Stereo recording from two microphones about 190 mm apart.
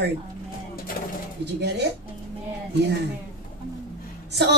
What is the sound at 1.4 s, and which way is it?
Speech, 60° right (ahead or behind).